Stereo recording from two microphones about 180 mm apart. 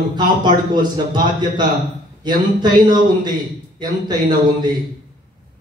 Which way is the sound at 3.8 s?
25° right (ahead or behind).